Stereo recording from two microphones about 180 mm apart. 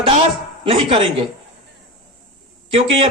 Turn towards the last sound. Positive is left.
turn(degrees=-30)  # may be behind; listen again after turning